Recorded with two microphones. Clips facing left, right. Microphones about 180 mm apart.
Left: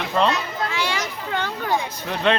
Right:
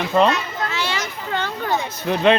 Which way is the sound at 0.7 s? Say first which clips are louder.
Even; 15° left (ahead or behind).